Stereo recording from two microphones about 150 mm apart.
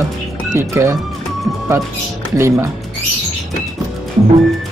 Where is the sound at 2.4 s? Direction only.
20° right (ahead or behind).